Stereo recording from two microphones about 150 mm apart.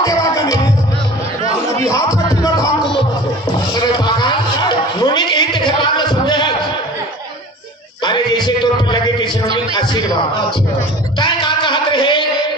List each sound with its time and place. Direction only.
0.0 s music: 20° left (ahead or behind)
1.9 s music: 25° left (ahead or behind)
3.7 s a sound: 30° left (ahead or behind)
8.0 s music: 30° left (ahead or behind)
11.1 s music: 30° left (ahead or behind)